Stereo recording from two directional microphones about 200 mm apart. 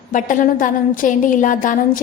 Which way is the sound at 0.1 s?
40° left (ahead or behind).